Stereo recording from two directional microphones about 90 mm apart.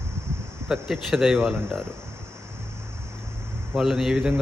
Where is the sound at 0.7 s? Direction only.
Centre (ahead or behind).